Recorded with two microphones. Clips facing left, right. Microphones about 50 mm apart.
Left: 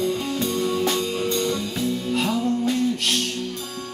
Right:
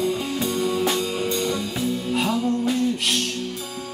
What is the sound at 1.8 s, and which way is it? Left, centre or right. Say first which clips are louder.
Music: even; centre.